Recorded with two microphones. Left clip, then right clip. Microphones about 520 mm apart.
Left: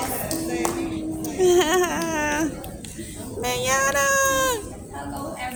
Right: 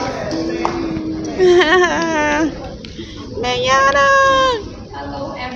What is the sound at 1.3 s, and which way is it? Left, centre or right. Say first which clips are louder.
Baby cry: right 8 dB; left.